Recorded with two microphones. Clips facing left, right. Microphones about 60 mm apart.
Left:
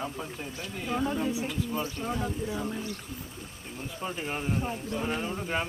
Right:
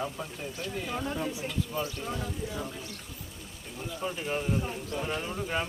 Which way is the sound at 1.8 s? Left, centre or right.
Left.